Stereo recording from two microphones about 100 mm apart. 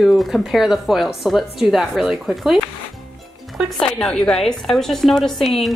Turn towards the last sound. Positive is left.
turn(degrees=0)  # may be behind; listen again after turning